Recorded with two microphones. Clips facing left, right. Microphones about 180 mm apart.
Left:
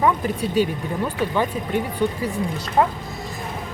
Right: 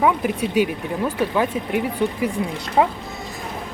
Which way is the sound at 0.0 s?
10° right (ahead or behind).